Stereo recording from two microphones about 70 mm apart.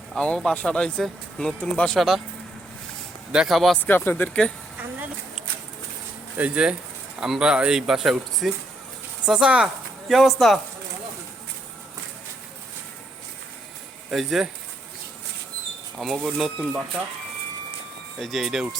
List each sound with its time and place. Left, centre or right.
0.2 s speech: centre
2.0 s speech: centre
3.3 s speech: centre
3.8 s speech: left
6.3 s speech: centre
10.1 s speech: centre
14.1 s speech: centre
16.0 s speech: centre
18.2 s speech: centre